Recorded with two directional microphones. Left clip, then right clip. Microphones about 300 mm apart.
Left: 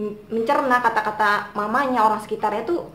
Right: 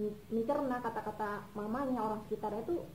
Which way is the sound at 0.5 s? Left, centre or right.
Centre.